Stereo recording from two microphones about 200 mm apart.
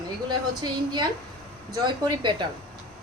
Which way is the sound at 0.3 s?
20° right (ahead or behind).